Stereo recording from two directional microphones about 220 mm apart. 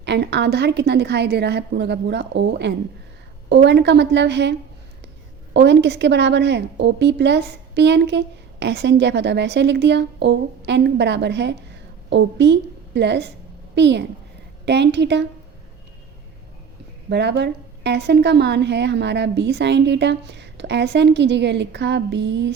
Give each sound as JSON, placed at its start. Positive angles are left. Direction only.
{"t": 0.0, "sound": "a woman's voice", "side_deg": -50}
{"t": 5.5, "sound": "a woman's voice", "side_deg": -50}
{"t": 17.1, "sound": "a woman's voice", "side_deg": -50}